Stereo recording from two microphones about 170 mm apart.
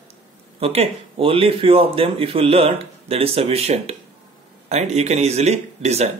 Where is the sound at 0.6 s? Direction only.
35° right (ahead or behind).